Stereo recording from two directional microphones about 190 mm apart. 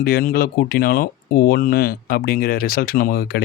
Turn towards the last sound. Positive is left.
turn(degrees=55)  # may be behind; listen again after turning